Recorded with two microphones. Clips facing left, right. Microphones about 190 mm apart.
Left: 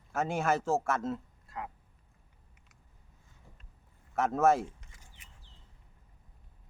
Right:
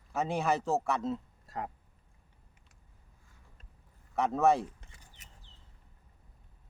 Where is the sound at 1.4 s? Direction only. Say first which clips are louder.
Right 3 dB; 40° right (ahead or behind).